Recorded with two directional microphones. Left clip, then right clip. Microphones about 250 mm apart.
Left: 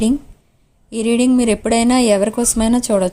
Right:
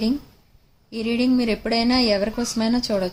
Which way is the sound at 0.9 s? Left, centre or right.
Left.